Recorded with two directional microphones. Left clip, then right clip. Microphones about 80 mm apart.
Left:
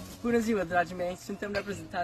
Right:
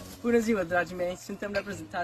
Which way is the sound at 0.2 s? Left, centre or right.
Left.